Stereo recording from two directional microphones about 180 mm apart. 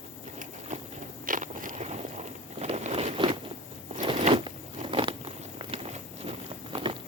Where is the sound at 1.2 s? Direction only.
50° right (ahead or behind); by 3.4 s 30° right (ahead or behind).